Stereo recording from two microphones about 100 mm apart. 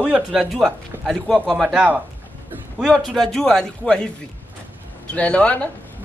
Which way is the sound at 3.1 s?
5° left (ahead or behind).